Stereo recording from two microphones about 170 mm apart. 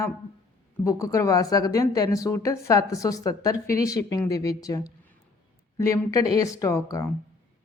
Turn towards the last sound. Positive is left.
turn(degrees=20)  # may be behind; listen again after turning